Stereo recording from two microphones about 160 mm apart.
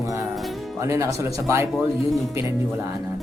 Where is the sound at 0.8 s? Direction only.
20° right (ahead or behind).